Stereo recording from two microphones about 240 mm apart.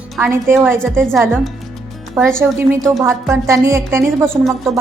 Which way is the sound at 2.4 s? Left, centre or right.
Centre.